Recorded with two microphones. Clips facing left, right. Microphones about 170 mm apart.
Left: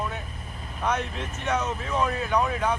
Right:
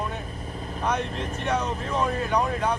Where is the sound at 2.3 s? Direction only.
10° right (ahead or behind).